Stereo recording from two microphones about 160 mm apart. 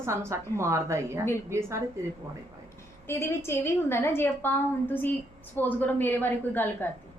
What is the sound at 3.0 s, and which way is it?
A woman's voice, 15° left (ahead or behind).